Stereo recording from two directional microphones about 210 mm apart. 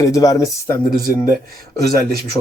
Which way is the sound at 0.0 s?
15° left (ahead or behind).